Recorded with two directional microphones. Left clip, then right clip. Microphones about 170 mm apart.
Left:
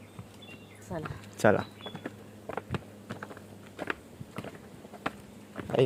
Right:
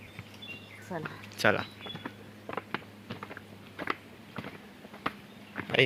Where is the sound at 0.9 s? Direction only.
30° left (ahead or behind).